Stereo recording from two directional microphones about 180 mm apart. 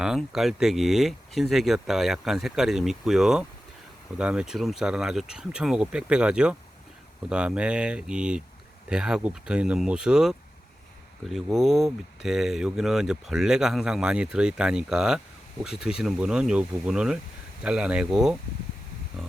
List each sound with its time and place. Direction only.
0.0 s speech: centre (ahead or behind)